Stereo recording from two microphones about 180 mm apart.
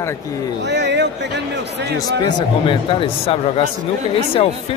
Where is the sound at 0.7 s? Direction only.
75° right (ahead or behind).